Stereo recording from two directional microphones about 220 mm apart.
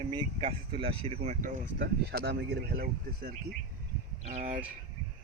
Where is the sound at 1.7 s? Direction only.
45° right (ahead or behind).